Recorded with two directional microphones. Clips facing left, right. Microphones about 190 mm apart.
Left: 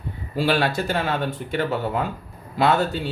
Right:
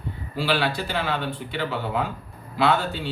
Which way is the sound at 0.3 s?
45° left (ahead or behind).